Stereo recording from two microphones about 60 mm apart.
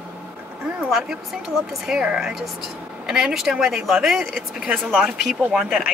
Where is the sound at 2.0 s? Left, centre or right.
Centre.